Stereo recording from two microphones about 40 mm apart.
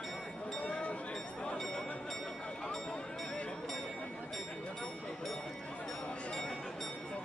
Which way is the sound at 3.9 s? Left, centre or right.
Left.